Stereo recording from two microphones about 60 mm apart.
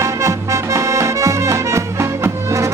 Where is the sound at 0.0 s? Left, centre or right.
Right.